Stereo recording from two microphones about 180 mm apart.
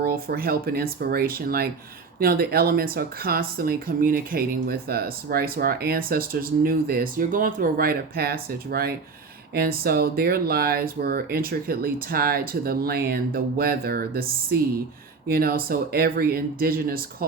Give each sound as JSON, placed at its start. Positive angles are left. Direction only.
{"t": 0.0, "sound": "speech", "side_deg": -55}